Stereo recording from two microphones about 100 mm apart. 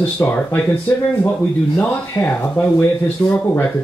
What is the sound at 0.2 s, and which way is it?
Speech, 20° left (ahead or behind).